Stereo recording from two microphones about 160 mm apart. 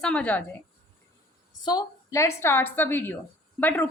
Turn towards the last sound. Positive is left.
turn(degrees=10)  # may be behind; listen again after turning